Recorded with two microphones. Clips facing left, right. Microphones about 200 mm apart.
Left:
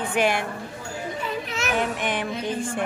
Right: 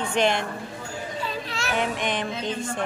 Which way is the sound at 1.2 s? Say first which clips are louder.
Left 2 dB; 20° left (ahead or behind).